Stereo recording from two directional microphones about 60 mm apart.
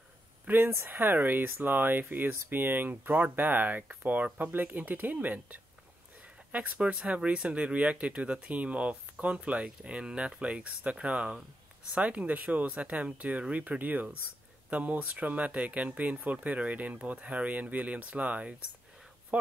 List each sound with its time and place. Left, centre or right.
0.5 s speech: right
6.2 s a sound: right
6.9 s speech: centre